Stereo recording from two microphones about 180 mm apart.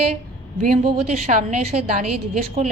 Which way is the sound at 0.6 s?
45° right (ahead or behind).